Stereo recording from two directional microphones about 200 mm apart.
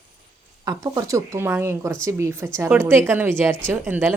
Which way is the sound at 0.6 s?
15° right (ahead or behind).